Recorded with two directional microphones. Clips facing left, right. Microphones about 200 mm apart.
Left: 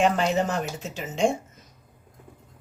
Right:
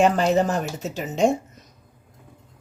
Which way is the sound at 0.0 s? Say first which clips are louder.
Right 4 dB; 40° right (ahead or behind).